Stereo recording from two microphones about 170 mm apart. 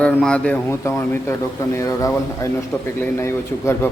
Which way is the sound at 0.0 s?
5° left (ahead or behind).